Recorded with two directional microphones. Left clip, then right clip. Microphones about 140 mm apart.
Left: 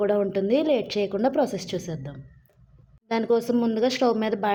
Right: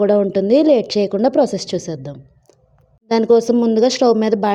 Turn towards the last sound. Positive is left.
turn(degrees=-40)  # may be behind; listen again after turning